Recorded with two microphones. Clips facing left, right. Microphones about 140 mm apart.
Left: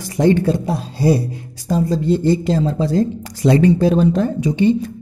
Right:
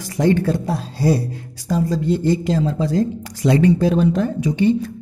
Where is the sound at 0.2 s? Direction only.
25° left (ahead or behind).